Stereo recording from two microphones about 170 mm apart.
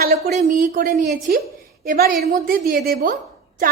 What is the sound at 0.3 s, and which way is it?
A woman's voice, 55° right (ahead or behind).